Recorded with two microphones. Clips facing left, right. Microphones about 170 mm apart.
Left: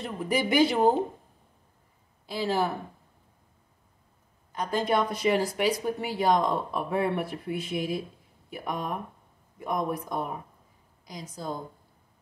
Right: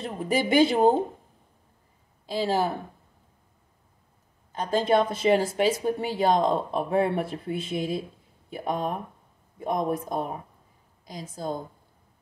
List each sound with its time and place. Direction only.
0.0 s speech: 25° right (ahead or behind)
2.3 s speech: 25° right (ahead or behind)
4.5 s speech: 25° right (ahead or behind)
11.1 s speech: 50° right (ahead or behind)